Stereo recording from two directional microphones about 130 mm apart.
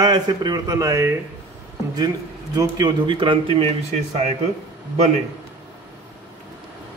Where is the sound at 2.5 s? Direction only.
30° right (ahead or behind).